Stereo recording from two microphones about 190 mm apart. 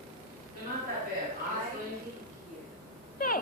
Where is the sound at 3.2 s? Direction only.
50° left (ahead or behind).